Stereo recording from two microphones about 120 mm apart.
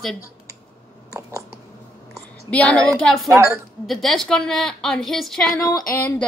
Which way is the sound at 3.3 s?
25° right (ahead or behind).